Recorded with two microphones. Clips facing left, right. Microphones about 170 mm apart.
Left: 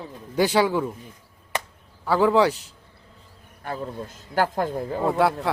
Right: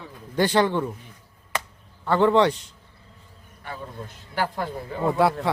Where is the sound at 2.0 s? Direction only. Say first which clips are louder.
Even; 5° left (ahead or behind).